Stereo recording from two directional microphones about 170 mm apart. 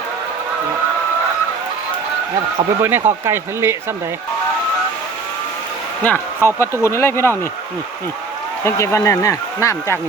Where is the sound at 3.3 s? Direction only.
15° right (ahead or behind).